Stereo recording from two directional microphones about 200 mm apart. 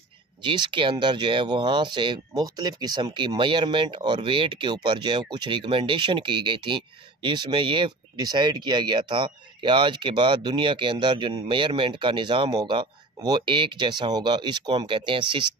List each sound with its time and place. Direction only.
0.4 s speech: 25° right (ahead or behind)